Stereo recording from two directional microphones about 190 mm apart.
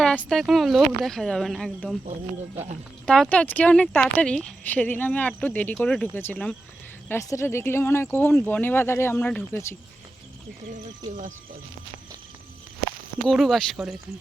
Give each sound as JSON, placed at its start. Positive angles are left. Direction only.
{"t": 0.0, "sound": "speech", "side_deg": 5}
{"t": 3.1, "sound": "speech", "side_deg": 5}
{"t": 11.1, "sound": "speech", "side_deg": -40}
{"t": 13.2, "sound": "speech", "side_deg": 0}